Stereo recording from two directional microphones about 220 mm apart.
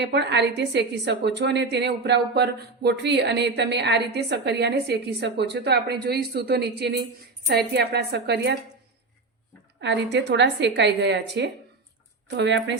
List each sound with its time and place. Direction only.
0.0 s a woman's voice: 50° right (ahead or behind)
9.8 s a woman's voice: 55° right (ahead or behind)